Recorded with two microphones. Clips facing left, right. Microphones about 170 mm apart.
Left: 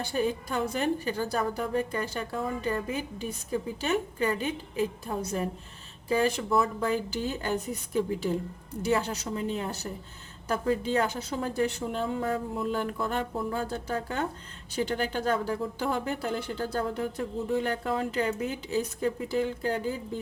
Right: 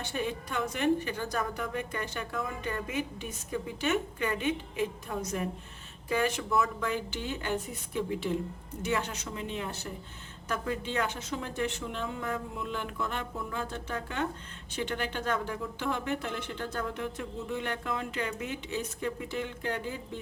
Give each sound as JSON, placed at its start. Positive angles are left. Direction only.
{"t": 0.0, "sound": "a woman's voice", "side_deg": 35}